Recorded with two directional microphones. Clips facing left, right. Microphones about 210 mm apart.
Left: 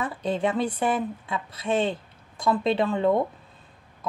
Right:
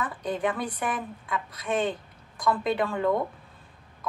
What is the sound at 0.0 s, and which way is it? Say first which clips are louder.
A woman's voice: left 3 dB; 25° left (ahead or behind).